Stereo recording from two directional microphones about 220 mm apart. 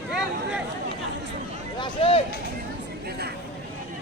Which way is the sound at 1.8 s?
25° left (ahead or behind).